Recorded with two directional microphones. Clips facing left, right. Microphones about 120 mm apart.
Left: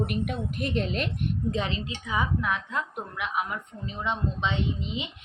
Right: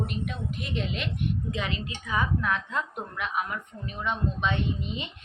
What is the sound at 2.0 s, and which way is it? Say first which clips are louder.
Speech: even; 15° left (ahead or behind).